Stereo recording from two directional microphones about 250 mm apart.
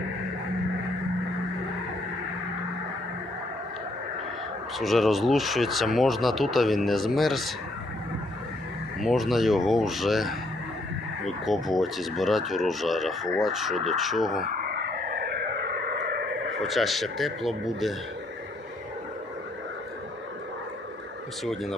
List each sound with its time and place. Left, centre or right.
4.8 s speech: centre
9.0 s speech: centre
14.8 s a sound: right
16.6 s speech: centre
21.4 s speech: centre